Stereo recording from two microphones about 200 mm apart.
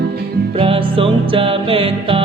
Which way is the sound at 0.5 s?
25° right (ahead or behind).